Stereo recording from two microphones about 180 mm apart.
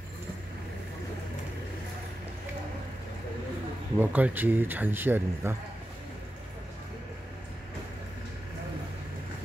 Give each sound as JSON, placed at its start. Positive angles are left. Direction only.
{"t": 4.0, "sound": "speech", "side_deg": -10}